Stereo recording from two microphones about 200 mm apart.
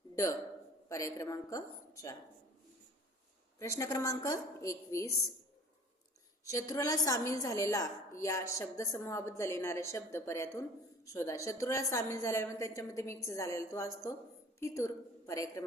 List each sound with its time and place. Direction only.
0.9 s a woman's voice: 15° left (ahead or behind)
3.6 s a woman's voice: 15° left (ahead or behind)
6.4 s a woman's voice: 15° left (ahead or behind)